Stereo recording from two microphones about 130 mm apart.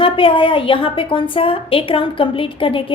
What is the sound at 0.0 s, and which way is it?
A woman's voice, 40° left (ahead or behind).